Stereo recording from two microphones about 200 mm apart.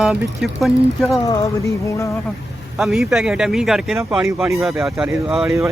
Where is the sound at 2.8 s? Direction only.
Centre (ahead or behind).